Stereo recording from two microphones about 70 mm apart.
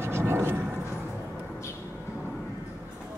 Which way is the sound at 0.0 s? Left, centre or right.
Right.